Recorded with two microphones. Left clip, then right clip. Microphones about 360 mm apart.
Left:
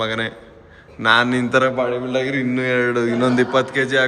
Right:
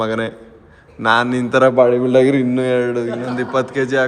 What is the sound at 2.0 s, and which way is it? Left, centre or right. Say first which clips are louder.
A man's voice: right 7 dB; centre.